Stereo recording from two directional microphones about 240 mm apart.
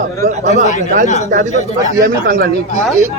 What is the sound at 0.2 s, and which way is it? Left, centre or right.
Speech, right.